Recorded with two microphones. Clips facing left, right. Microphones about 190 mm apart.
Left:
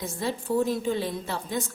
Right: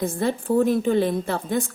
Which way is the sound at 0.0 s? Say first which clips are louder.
Right 7 dB; 55° right (ahead or behind).